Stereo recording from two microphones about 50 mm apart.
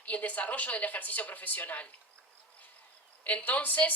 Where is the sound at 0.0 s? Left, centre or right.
Left.